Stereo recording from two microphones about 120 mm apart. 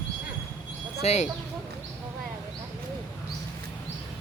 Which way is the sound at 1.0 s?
70° left (ahead or behind).